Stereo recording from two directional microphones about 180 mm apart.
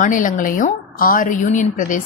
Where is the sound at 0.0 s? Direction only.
45° left (ahead or behind).